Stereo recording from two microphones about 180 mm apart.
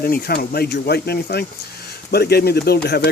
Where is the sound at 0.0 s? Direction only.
55° left (ahead or behind).